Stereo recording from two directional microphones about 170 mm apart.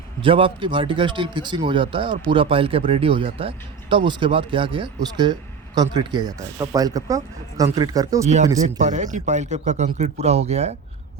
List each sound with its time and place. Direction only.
0.2 s speech: 30° right (ahead or behind)
8.8 s a man's voice: 45° right (ahead or behind)